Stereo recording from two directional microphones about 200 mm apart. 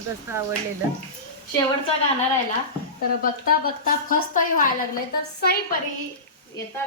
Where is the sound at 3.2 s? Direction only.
45° left (ahead or behind).